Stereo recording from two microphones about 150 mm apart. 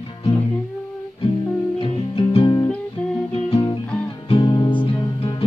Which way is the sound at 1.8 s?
35° left (ahead or behind).